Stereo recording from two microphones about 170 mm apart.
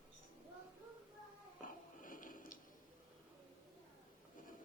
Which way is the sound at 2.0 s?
55° left (ahead or behind).